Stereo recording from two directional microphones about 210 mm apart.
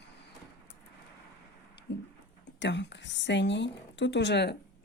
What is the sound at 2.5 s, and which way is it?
A woman's voice, 55° left (ahead or behind).